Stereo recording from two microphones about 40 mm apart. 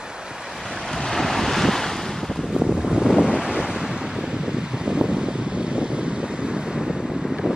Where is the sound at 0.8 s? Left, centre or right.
Centre.